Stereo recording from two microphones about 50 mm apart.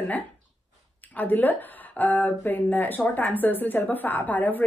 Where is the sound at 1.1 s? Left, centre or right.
Left.